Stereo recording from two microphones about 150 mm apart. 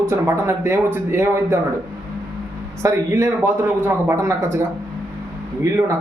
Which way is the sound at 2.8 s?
15° right (ahead or behind).